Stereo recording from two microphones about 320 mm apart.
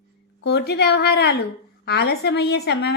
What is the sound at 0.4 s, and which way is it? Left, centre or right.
A woman's voice, left.